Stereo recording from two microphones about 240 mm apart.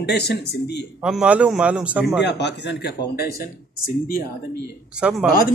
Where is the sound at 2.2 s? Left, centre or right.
Left.